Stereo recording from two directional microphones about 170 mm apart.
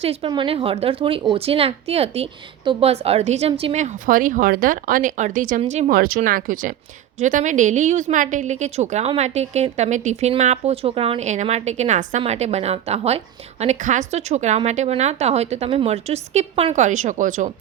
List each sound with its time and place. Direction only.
0.0 s a woman's voice: 35° right (ahead or behind)
6.0 s a woman's voice: 55° right (ahead or behind)